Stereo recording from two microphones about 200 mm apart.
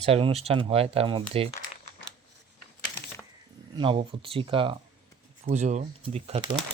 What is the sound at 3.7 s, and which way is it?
Speech, 25° right (ahead or behind).